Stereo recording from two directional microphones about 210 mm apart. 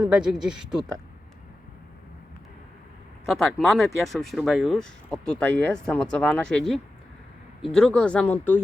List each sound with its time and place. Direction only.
0.1 s speech: 5° right (ahead or behind)
3.2 s speech: centre (ahead or behind)